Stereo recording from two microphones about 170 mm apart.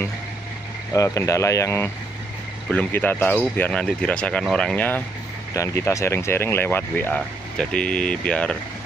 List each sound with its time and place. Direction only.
0.9 s speech: 20° left (ahead or behind)